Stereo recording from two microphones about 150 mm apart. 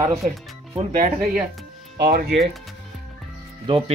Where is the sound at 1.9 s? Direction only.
90° right.